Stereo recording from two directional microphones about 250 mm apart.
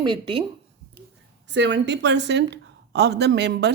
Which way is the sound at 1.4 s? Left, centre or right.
Right.